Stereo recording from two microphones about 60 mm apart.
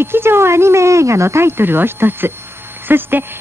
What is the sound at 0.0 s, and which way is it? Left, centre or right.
Speech, right.